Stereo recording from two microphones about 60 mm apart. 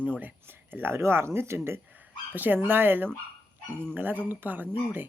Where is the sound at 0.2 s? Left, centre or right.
Right.